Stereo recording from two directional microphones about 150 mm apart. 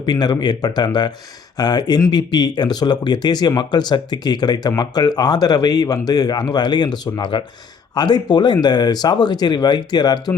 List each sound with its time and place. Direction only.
0.0 s speech: 25° left (ahead or behind)